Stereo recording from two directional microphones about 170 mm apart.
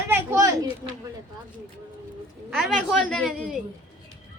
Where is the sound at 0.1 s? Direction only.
15° right (ahead or behind).